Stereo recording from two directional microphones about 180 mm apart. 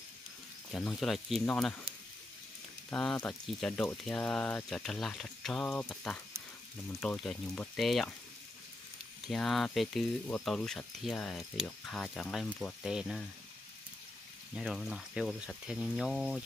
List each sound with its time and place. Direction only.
0.7 s speech: centre (ahead or behind)
2.9 s speech: 5° left (ahead or behind)
9.3 s speech: centre (ahead or behind)
14.5 s speech: centre (ahead or behind)